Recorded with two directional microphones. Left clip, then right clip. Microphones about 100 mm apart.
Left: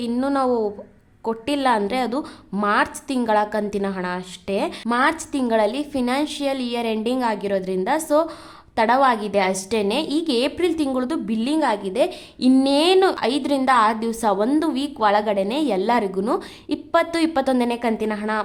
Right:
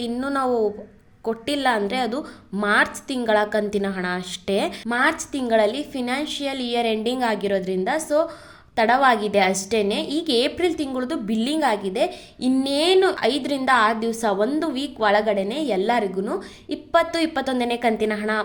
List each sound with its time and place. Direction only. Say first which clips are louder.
0.0 s a woman's voice: left 2 dB; 25° left (ahead or behind)
2.6 s a woman's voice: even; 20° left (ahead or behind)
4.9 s a woman's voice: left 2 dB; 30° left (ahead or behind)
11.3 s a woman's voice: right 1 dB; 20° left (ahead or behind)